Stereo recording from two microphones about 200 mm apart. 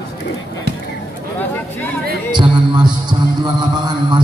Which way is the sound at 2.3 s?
20° right (ahead or behind).